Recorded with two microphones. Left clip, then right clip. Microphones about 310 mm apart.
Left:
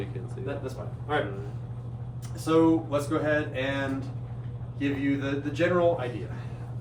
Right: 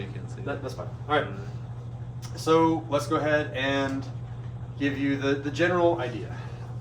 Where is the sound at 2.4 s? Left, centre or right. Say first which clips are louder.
Right 1 dB; right.